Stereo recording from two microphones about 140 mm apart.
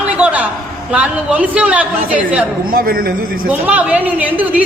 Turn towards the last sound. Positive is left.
turn(degrees=-10)  # may be behind; listen again after turning